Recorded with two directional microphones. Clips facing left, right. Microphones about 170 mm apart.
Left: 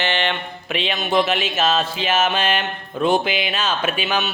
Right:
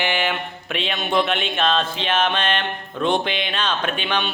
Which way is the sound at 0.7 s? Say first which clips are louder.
Left 2 dB; centre (ahead or behind).